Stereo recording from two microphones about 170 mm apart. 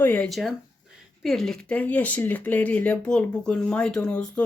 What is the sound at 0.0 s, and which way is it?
Speech, 10° left (ahead or behind).